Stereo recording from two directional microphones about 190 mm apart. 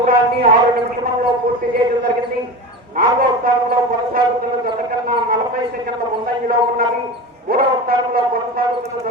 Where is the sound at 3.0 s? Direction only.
50° right (ahead or behind).